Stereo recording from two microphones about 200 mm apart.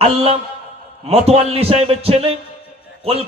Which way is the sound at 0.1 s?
30° right (ahead or behind).